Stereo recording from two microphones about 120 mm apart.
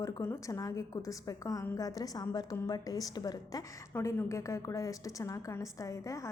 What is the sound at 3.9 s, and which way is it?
Speech, 20° left (ahead or behind).